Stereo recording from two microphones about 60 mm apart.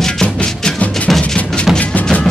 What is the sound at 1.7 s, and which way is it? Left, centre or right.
Music, centre.